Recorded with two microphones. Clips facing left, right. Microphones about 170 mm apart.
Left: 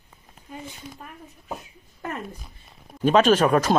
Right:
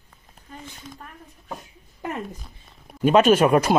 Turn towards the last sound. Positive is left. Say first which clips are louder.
# right 2 dB
turn(degrees=-10)  # may be behind; listen again after turning